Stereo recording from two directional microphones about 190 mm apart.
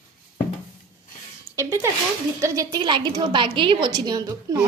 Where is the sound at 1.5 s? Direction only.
10° right (ahead or behind).